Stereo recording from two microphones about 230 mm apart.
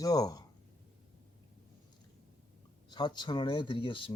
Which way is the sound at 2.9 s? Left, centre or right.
Centre.